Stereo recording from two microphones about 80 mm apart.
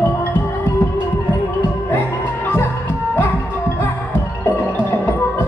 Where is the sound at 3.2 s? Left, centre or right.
Left.